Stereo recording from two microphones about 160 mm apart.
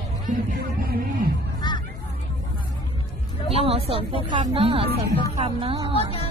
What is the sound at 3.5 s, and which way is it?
Speech, 35° right (ahead or behind).